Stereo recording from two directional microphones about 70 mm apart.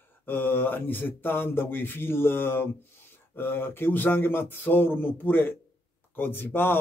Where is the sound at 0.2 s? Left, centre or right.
Left.